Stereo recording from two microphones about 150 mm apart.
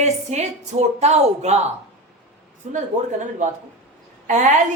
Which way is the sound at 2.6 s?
50° right (ahead or behind).